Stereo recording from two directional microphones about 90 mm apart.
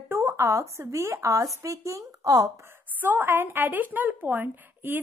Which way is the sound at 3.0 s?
20° right (ahead or behind).